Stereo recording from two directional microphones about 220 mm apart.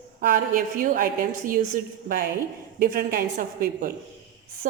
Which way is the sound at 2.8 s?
40° right (ahead or behind).